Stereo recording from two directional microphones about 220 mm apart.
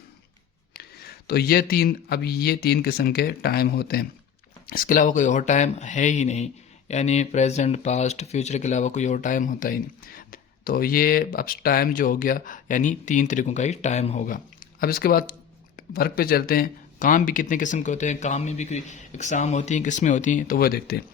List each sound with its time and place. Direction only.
0.8 s speech: 45° left (ahead or behind)